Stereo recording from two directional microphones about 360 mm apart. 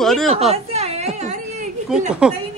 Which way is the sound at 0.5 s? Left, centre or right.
Centre.